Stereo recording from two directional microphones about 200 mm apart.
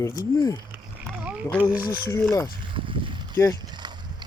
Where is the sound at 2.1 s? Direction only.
15° left (ahead or behind).